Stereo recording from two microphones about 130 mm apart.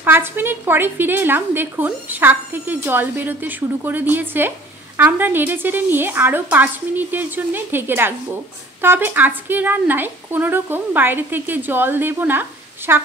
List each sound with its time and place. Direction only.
0.0 s a woman's voice: 15° right (ahead or behind)